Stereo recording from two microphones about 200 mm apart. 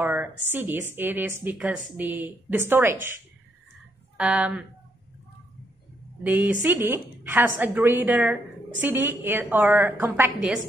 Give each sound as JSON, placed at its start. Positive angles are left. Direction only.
{"t": 0.0, "sound": "a sound", "side_deg": -10}
{"t": 0.5, "sound": "a woman's voice", "side_deg": -10}
{"t": 4.2, "sound": "speech", "side_deg": -5}
{"t": 6.2, "sound": "a woman's voice", "side_deg": -10}